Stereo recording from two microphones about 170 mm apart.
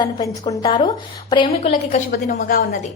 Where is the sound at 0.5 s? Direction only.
25° left (ahead or behind).